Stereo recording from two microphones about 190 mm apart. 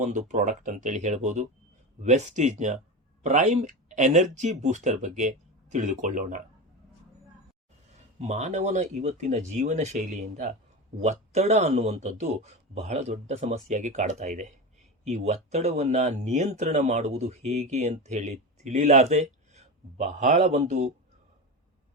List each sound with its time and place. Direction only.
0.1 s speech: 40° right (ahead or behind)
8.2 s speech: 35° right (ahead or behind)